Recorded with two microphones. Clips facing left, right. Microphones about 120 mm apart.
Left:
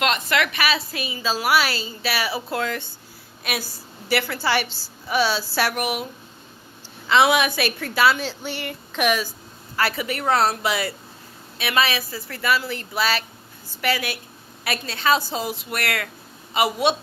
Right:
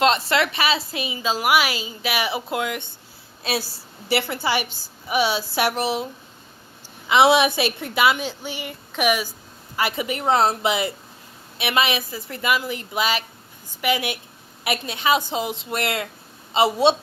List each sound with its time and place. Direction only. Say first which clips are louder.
0.0 s a woman's voice: right 3 dB; 30° right (ahead or behind)
3.4 s a woman's voice: right 3 dB; 30° right (ahead or behind)
7.1 s a woman's voice: right 2 dB; 25° right (ahead or behind)